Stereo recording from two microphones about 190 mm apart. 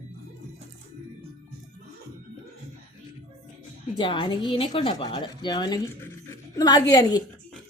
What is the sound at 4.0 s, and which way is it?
A woman's voice, 25° left (ahead or behind).